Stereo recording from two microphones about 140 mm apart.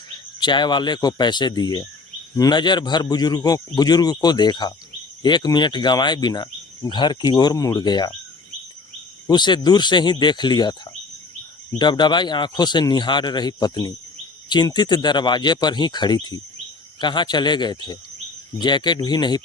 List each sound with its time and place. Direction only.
0.3 s a man's voice: 30° left (ahead or behind)
9.2 s speech: 30° left (ahead or behind)
11.8 s speech: 30° left (ahead or behind)